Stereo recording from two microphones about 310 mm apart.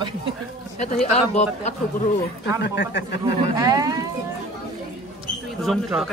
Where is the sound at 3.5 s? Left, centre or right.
Centre.